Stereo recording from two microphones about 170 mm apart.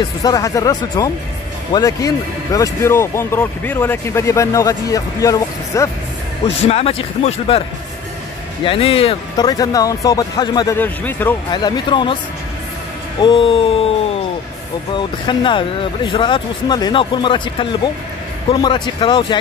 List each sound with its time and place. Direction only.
0.2 s speech: 20° left (ahead or behind)
6.4 s speech: 35° left (ahead or behind)
8.6 s speech: 35° left (ahead or behind)
9.5 s speech: 20° left (ahead or behind)
10.8 s speech: 10° left (ahead or behind)
11.5 s speech: 25° left (ahead or behind)
13.2 s speech: 30° left (ahead or behind)
15.0 s speech: 30° left (ahead or behind)